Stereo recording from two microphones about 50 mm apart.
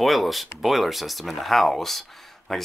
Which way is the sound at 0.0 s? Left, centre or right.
Centre.